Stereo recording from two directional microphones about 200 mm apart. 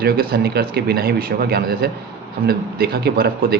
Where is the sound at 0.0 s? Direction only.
50° right (ahead or behind).